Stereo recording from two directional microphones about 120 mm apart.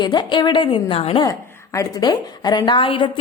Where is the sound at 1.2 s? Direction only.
30° left (ahead or behind).